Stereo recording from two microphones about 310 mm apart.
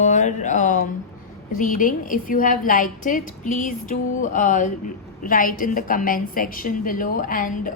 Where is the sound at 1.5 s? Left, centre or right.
Left.